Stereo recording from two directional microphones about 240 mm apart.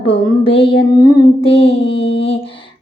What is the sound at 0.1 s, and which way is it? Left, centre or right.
Child singing, left.